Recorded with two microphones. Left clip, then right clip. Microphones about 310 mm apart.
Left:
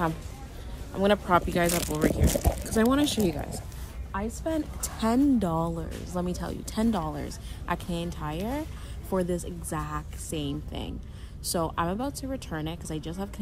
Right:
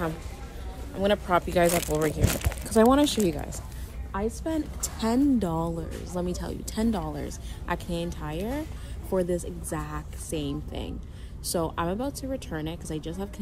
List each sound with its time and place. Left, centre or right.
0.9 s a woman's voice: centre
4.1 s a woman's voice: centre